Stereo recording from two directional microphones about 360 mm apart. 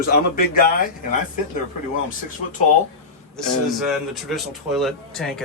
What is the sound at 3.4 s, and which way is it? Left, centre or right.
A man's voice, centre.